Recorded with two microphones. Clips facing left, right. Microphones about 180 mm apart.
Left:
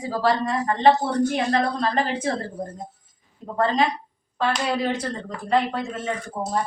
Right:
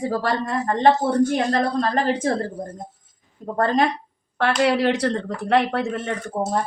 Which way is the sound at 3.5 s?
55° right (ahead or behind).